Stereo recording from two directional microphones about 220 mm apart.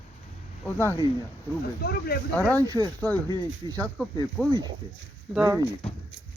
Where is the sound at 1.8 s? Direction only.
45° left (ahead or behind).